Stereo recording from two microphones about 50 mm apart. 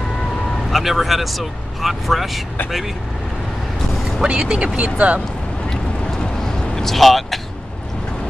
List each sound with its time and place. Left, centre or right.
0.7 s speech: centre
4.2 s speech: centre
5.7 s vehicle: centre